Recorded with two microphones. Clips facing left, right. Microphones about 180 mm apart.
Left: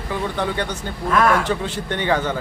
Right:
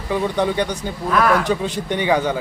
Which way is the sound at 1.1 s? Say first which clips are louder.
Even; centre (ahead or behind).